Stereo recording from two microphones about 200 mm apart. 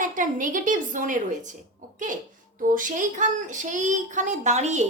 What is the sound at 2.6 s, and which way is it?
A child's voice, 40° right (ahead or behind).